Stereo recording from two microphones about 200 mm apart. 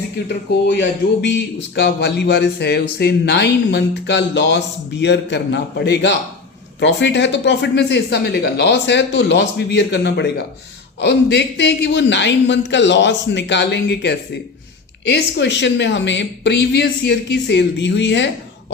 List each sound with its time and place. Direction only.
1.2 s speech: 60° left (ahead or behind)